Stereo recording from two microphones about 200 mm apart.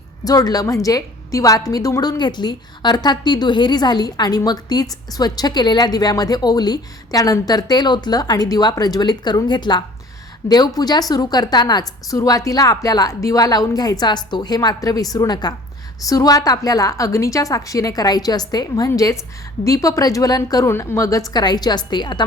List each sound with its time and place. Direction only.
0.3 s a woman's voice: 20° left (ahead or behind)